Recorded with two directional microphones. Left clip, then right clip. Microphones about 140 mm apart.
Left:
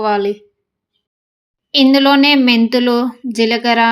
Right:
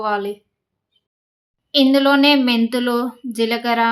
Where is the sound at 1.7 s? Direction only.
25° left (ahead or behind).